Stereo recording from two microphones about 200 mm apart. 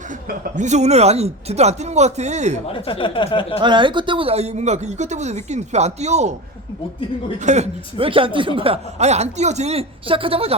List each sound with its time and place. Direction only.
0.3 s speech: 40° right (ahead or behind)
2.7 s a sound: 25° left (ahead or behind)
3.6 s speech: 25° right (ahead or behind)
7.3 s a man's voice: 35° right (ahead or behind)